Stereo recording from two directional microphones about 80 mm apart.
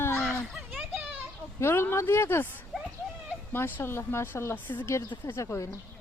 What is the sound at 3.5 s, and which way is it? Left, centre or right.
Speech, left.